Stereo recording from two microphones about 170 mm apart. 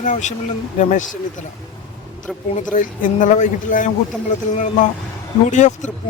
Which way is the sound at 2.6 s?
50° left (ahead or behind).